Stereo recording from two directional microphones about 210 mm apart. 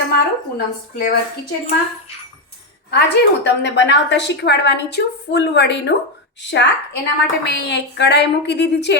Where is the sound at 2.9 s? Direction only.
55° left (ahead or behind).